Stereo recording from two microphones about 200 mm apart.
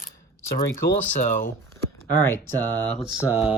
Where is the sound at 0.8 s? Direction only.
55° left (ahead or behind).